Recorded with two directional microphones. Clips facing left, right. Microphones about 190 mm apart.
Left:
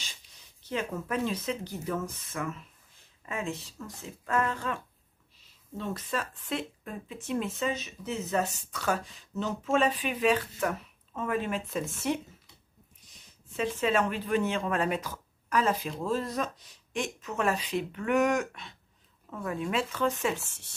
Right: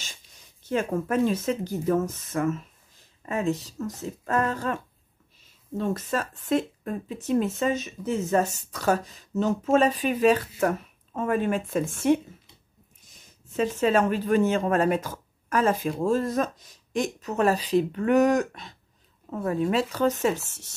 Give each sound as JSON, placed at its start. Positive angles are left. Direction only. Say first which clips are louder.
{"t": 0.7, "sound": "speech", "louder": "right 7 dB", "side_deg": -50}
{"t": 5.8, "sound": "speech", "louder": "right 6 dB", "side_deg": -45}
{"t": 13.6, "sound": "speech", "louder": "right 5 dB", "side_deg": -40}